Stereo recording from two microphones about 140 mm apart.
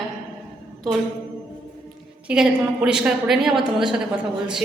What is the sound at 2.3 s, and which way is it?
A woman's voice, 5° right (ahead or behind).